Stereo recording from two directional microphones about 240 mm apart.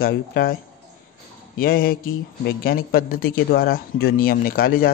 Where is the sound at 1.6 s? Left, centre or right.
Left.